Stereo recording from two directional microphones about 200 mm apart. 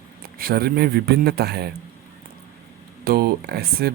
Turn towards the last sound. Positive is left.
turn(degrees=-50)  # may be behind; listen again after turning